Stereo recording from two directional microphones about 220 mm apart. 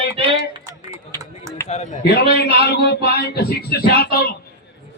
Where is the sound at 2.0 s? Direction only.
45° left (ahead or behind).